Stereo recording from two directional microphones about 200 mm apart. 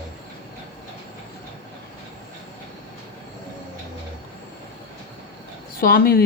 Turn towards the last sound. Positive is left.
turn(degrees=50)  # may be behind; listen again after turning